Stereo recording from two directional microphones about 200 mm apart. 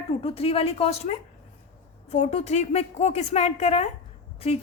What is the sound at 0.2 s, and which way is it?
A woman's voice, 30° left (ahead or behind).